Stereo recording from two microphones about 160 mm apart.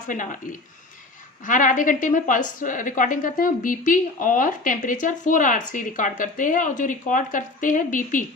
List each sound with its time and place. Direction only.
0.1 s a woman's voice: 55° left (ahead or behind)
1.5 s a woman's voice: 55° left (ahead or behind)